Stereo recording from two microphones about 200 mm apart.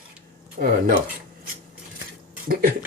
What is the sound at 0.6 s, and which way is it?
Speech, 45° right (ahead or behind).